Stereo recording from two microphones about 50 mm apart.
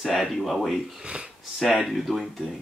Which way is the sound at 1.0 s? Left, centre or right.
Centre.